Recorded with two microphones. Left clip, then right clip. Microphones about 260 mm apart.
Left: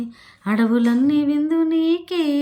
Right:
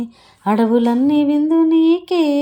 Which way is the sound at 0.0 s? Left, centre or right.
Centre.